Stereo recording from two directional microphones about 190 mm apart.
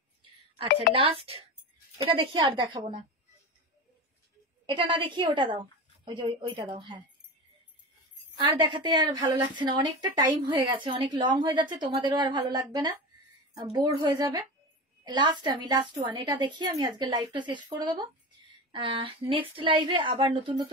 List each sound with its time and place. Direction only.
0.9 s a woman's voice: 30° right (ahead or behind)
4.6 s a woman's voice: 25° right (ahead or behind)
8.5 s a woman's voice: 25° right (ahead or behind)